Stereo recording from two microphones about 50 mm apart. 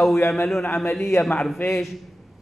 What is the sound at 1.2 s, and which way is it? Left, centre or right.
Speech, centre.